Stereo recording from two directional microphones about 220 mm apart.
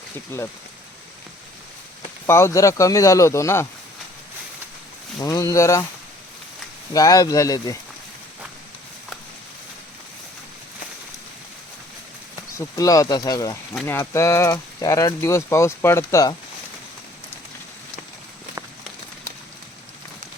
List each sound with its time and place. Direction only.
0.3 s speech: 10° left (ahead or behind)
2.2 s speech: 10° left (ahead or behind)
5.2 s speech: 15° left (ahead or behind)
6.9 s speech: 15° left (ahead or behind)
12.5 s speech: 15° left (ahead or behind)